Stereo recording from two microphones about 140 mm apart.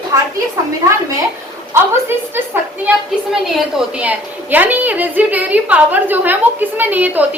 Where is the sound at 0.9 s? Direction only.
25° right (ahead or behind).